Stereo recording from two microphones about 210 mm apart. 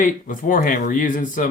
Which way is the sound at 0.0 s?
40° left (ahead or behind).